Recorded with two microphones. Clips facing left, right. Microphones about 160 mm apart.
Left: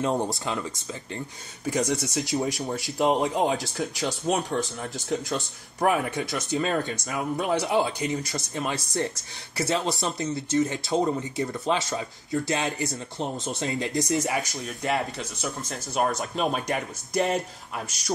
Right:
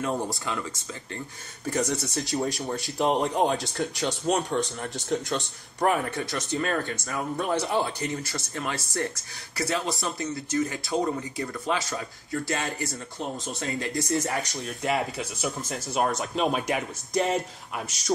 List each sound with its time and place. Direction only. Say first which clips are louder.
0.0 s speech: left 3 dB; 20° left (ahead or behind)
1.7 s speech: left 2 dB; 15° left (ahead or behind)
2.2 s speech: left 1 dB; centre (ahead or behind)
6.6 s speech: left 2 dB; 15° left (ahead or behind)
7.5 s speech: left 3 dB; centre (ahead or behind)
7.8 s speech: left 2 dB; 15° left (ahead or behind)
14.1 s speech: left 1 dB; 5° left (ahead or behind)